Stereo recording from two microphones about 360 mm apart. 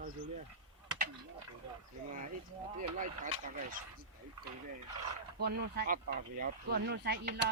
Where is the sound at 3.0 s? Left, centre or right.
Right.